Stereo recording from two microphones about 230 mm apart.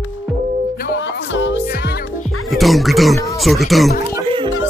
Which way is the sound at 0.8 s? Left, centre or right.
Left.